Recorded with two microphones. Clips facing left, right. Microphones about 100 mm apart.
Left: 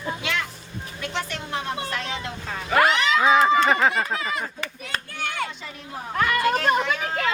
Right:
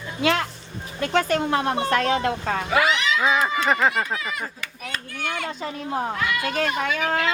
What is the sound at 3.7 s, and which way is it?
Speech, centre (ahead or behind).